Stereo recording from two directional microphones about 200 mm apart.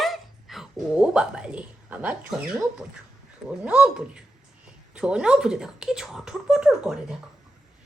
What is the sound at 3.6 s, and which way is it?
A woman's voice, 5° right (ahead or behind).